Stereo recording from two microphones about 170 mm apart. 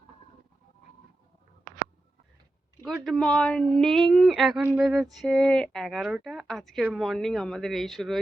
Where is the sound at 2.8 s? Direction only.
Centre (ahead or behind).